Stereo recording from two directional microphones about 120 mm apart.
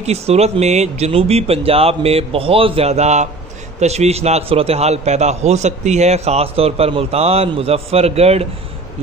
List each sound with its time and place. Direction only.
0.0 s a man's voice: 65° right (ahead or behind)